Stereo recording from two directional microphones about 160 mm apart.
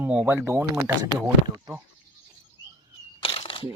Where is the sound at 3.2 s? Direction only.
35° left (ahead or behind).